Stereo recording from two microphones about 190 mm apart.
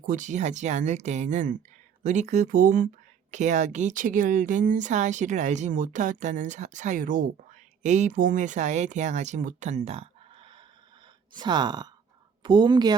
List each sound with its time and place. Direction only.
0.0 s speech: 45° right (ahead or behind)
11.3 s a woman's voice: 25° right (ahead or behind)